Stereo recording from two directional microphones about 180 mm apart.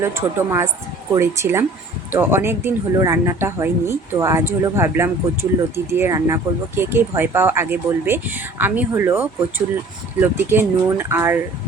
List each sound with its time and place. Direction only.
0.0 s speech: 15° right (ahead or behind)